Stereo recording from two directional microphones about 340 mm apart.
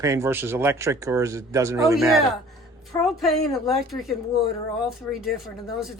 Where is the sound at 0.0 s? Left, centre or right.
Centre.